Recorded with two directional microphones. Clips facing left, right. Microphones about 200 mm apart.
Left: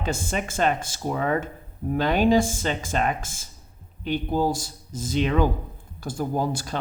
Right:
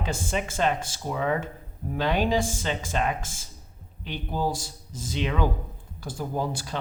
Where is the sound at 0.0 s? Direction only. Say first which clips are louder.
Left 2 dB; 45° left (ahead or behind).